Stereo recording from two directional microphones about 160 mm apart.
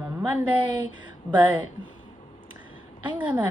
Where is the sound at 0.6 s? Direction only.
30° right (ahead or behind).